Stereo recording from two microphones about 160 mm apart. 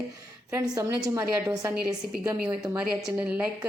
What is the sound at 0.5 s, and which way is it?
A man's voice, 20° right (ahead or behind).